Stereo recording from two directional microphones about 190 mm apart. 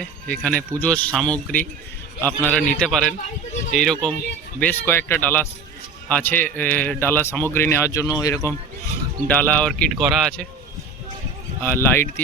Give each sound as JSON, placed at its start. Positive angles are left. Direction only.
{"t": 0.0, "sound": "a man's voice", "side_deg": 5}
{"t": 11.6, "sound": "speech", "side_deg": 10}